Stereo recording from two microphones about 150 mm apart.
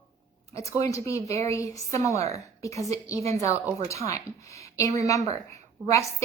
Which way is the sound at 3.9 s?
20° left (ahead or behind).